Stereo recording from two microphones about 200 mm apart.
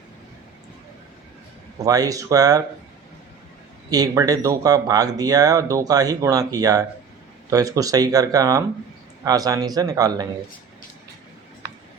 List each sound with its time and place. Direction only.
1.8 s speech: 20° right (ahead or behind)
3.8 s a man's voice: 20° right (ahead or behind)